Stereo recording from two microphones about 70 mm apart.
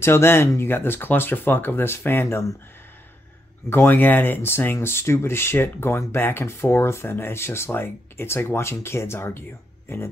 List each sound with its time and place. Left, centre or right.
0.0 s speech: left
3.7 s speech: left